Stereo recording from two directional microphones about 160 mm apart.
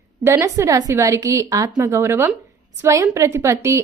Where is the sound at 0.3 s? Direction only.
20° right (ahead or behind).